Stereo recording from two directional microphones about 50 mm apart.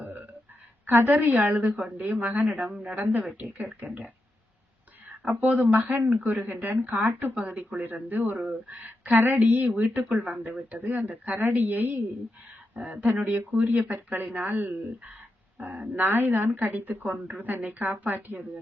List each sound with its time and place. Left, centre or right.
0.9 s speech: right
5.4 s speech: right
7.3 s speech: right
8.1 s speech: right
9.1 s a sound: right
9.5 s speech: right
16.0 s speech: right